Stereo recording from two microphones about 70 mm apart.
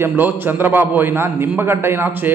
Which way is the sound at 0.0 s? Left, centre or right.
Right.